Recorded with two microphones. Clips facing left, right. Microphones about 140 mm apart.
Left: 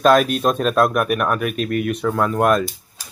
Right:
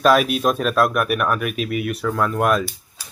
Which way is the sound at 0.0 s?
5° right (ahead or behind).